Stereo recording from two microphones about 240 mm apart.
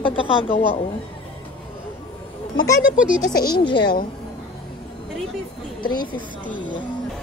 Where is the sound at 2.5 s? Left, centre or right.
Centre.